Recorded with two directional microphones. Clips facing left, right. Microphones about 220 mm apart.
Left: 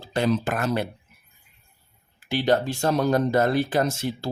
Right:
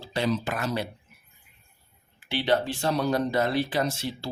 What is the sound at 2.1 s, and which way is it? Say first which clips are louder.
Speech: left 3 dB; 45° left (ahead or behind).